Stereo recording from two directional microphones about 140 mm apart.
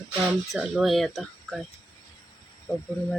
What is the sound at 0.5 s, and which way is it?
Speech, centre (ahead or behind).